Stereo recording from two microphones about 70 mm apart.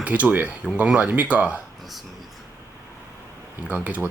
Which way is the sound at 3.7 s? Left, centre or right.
Right.